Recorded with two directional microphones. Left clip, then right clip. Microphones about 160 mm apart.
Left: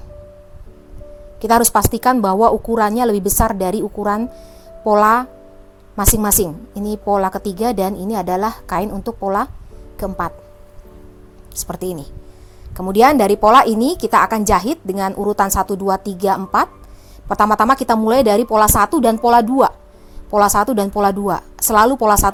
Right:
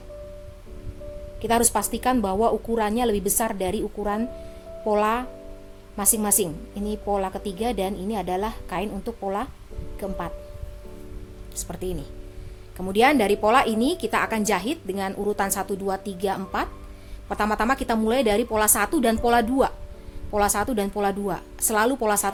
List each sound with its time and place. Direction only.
1.4 s a woman's voice: 35° left (ahead or behind)
11.5 s a woman's voice: 35° left (ahead or behind)